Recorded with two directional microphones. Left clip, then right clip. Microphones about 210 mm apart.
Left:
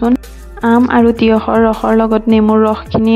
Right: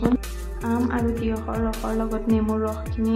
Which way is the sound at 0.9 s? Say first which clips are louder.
Left 16 dB; 45° left (ahead or behind).